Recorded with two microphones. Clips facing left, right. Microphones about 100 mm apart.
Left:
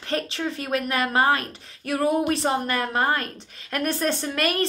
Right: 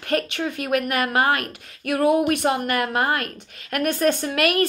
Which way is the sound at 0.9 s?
60° right (ahead or behind).